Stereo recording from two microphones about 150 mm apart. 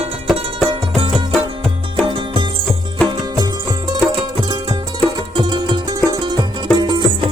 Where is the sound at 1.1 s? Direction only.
5° left (ahead or behind).